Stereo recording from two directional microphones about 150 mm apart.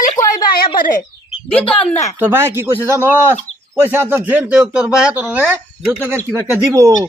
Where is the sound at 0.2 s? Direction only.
20° left (ahead or behind).